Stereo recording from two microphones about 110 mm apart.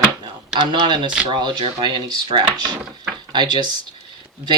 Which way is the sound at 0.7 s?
45° right (ahead or behind).